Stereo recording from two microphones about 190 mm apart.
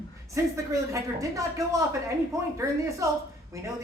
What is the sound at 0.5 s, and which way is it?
Speech, 15° right (ahead or behind).